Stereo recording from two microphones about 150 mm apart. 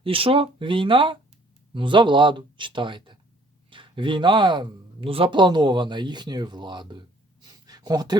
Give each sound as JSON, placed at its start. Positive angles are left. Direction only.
{"t": 0.0, "sound": "a man's voice", "side_deg": -35}